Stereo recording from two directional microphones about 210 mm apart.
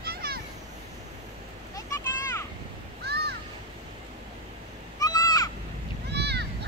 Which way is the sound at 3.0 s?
50° right (ahead or behind).